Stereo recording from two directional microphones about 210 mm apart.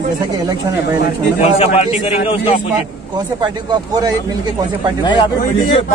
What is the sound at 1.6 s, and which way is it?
Speech, 35° left (ahead or behind).